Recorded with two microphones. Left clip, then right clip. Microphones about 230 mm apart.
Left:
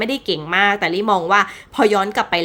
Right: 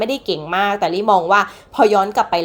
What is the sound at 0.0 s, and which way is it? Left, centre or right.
Speech, left.